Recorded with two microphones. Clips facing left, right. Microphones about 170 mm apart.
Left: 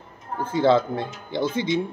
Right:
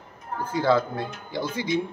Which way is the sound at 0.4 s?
25° left (ahead or behind).